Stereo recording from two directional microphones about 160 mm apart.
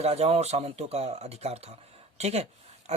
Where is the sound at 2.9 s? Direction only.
45° right (ahead or behind).